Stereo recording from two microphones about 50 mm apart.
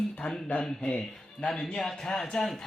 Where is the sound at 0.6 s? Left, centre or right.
Centre.